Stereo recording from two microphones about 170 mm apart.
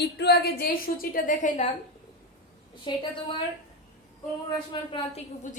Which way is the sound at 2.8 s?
30° left (ahead or behind).